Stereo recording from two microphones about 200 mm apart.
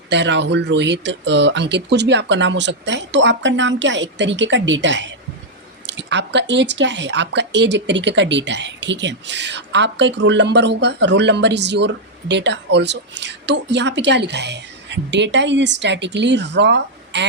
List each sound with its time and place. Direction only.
0.1 s speech: 60° right (ahead or behind)